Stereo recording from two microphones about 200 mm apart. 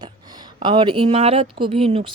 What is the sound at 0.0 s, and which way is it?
Speech, 20° right (ahead or behind).